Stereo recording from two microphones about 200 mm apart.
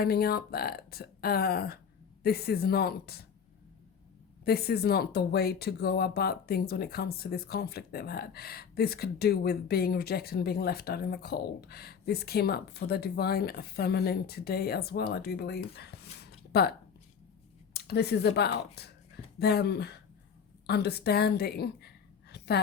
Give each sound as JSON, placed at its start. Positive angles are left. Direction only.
{"t": 0.0, "sound": "speech", "side_deg": 50}
{"t": 4.4, "sound": "speech", "side_deg": 50}
{"t": 17.7, "sound": "a woman's voice", "side_deg": 55}